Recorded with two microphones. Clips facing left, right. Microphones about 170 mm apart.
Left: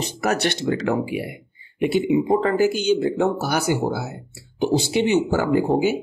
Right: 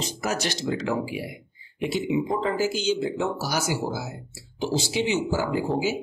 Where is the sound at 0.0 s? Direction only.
60° left (ahead or behind).